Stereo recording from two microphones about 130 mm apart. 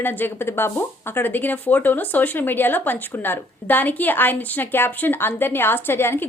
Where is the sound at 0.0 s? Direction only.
15° left (ahead or behind).